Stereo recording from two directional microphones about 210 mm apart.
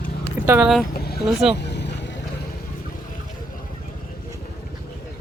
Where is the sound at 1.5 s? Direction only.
55° left (ahead or behind).